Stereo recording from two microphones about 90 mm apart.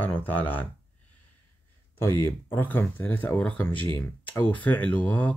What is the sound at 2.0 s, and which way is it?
Speech, 30° left (ahead or behind).